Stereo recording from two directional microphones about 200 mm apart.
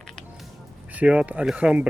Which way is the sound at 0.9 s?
5° right (ahead or behind).